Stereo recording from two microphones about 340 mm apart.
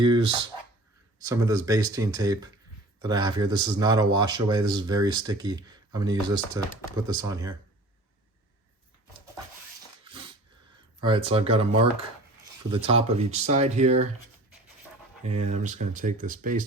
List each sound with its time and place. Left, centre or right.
0.0 s speech: centre
11.3 s speech: centre
15.4 s speech: right